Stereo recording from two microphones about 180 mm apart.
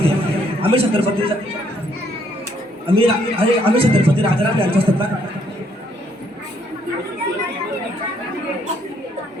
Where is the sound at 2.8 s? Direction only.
30° right (ahead or behind).